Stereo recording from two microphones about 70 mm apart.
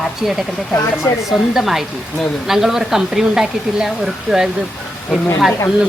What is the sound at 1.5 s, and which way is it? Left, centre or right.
A woman's voice, centre.